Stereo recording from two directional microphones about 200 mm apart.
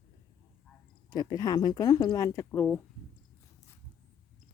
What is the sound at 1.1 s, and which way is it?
Speech, 20° left (ahead or behind).